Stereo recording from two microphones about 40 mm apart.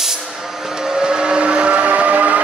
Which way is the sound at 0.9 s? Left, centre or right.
Centre.